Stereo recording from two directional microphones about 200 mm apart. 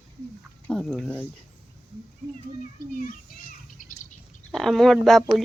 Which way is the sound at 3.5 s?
40° left (ahead or behind).